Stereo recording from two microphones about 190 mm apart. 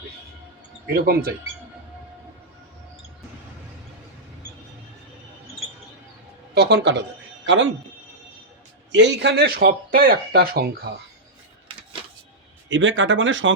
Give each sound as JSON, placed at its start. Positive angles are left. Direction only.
{"t": 0.9, "sound": "speech", "side_deg": -50}
{"t": 6.5, "sound": "speech", "side_deg": -60}
{"t": 8.9, "sound": "speech", "side_deg": -65}
{"t": 12.6, "sound": "speech", "side_deg": -75}